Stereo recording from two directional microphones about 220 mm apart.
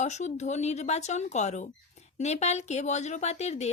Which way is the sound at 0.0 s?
30° left (ahead or behind).